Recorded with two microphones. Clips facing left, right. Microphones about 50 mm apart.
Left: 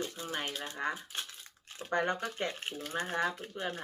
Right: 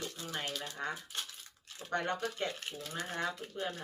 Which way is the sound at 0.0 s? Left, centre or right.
Left.